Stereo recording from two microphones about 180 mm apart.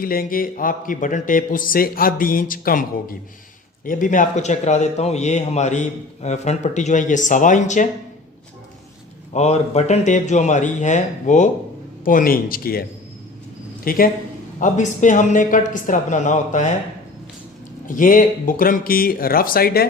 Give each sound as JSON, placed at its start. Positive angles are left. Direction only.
{"t": 0.0, "sound": "a man's voice", "side_deg": 55}
{"t": 9.3, "sound": "a man's voice", "side_deg": 40}
{"t": 13.8, "sound": "speech", "side_deg": 50}
{"t": 17.8, "sound": "speech", "side_deg": 50}